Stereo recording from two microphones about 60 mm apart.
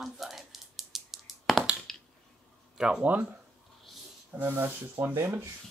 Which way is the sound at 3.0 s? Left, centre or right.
Right.